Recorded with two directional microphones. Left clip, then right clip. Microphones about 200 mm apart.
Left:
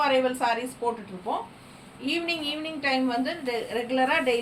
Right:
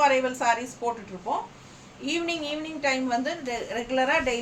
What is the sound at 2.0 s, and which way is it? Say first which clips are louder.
A woman's voice: even; 15° right (ahead or behind).